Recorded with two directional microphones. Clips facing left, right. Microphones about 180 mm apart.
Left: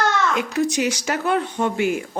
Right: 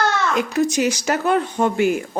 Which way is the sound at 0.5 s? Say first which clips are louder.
Right 2 dB; 45° right (ahead or behind).